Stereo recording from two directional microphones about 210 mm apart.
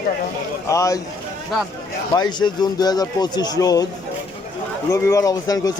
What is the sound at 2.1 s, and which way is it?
Speech, 20° left (ahead or behind).